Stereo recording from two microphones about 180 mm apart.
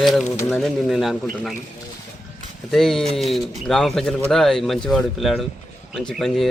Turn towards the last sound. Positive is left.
turn(degrees=0)  # may be behind; listen again after turning